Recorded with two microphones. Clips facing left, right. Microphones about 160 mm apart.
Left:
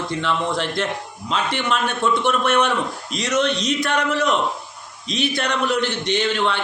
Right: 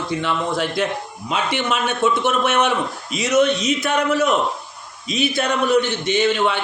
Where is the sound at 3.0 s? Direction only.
5° right (ahead or behind).